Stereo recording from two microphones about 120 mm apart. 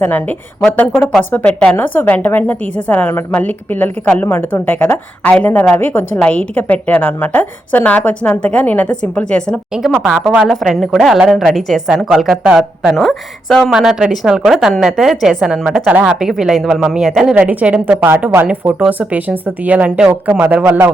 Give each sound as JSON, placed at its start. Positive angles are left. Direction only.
{"t": 0.0, "sound": "a woman's voice", "side_deg": 15}
{"t": 9.7, "sound": "a woman's voice", "side_deg": -5}